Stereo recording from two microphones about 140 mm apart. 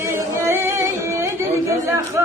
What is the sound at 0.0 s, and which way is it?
Singing, 20° right (ahead or behind).